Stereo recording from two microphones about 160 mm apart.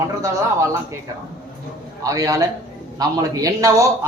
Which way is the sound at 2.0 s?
20° right (ahead or behind).